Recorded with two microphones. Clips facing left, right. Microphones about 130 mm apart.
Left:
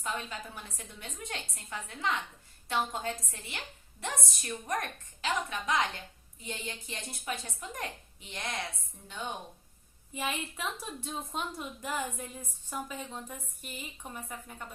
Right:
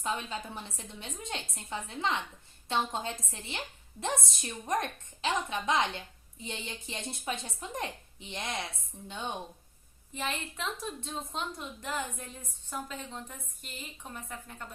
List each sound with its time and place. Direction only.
0.0 s a woman's voice: 25° right (ahead or behind)
10.2 s a woman's voice: 10° left (ahead or behind)